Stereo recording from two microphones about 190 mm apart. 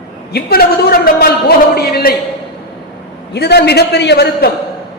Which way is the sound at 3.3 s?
60° left (ahead or behind).